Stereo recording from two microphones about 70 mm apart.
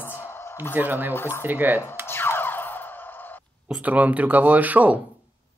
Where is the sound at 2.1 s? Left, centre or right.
Left.